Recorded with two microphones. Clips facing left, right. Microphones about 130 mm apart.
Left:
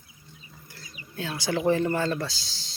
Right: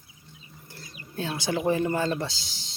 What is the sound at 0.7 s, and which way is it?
Bird, 25° right (ahead or behind).